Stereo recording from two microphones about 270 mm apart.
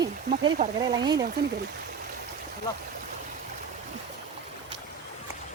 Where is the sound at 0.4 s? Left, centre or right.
Centre.